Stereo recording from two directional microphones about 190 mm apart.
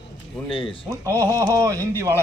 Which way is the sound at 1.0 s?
15° right (ahead or behind).